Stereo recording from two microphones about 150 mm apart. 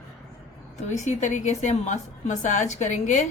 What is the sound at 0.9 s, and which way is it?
Speech, 55° left (ahead or behind).